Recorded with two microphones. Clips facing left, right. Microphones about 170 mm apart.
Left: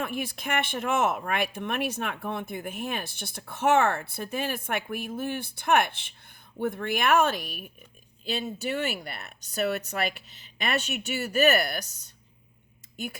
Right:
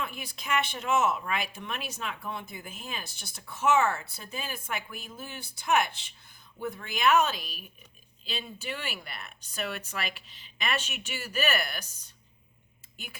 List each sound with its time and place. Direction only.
0.0 s a woman's voice: 50° left (ahead or behind)